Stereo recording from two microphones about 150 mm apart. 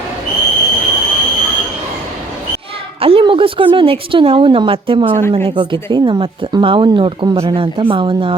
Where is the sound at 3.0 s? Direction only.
40° right (ahead or behind).